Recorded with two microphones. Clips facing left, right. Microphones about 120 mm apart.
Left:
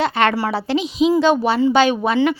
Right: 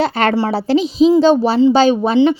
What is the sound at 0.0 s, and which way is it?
A woman's voice, 35° right (ahead or behind).